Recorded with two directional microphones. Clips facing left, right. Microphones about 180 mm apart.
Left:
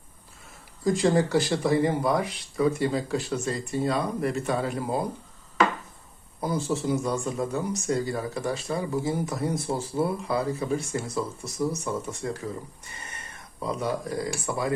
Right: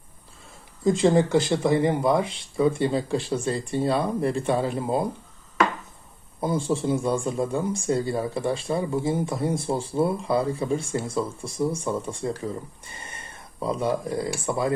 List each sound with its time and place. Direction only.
0.9 s a man's voice: 25° right (ahead or behind)
6.4 s a man's voice: 25° right (ahead or behind)